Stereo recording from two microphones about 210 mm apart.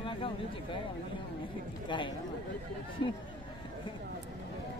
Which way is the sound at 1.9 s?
20° left (ahead or behind).